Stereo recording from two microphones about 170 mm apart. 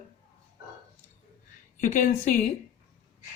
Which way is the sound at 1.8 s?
45° left (ahead or behind).